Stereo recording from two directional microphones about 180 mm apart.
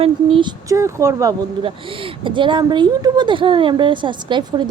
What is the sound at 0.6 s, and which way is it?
Speech, 15° right (ahead or behind).